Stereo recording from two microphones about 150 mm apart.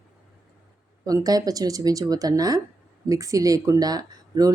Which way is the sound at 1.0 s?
25° right (ahead or behind).